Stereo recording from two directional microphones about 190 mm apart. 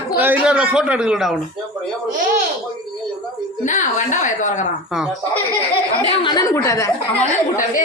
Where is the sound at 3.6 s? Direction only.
40° left (ahead or behind).